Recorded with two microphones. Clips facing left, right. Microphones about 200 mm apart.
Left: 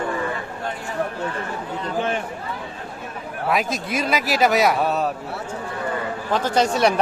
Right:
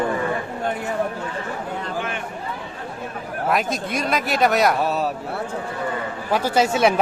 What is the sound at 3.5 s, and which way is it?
A man's voice, centre (ahead or behind).